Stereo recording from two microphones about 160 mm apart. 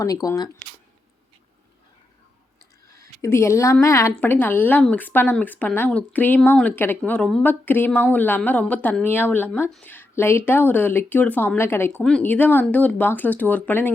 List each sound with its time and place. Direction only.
0.0 s speech: 20° left (ahead or behind)
3.2 s speech: 15° left (ahead or behind)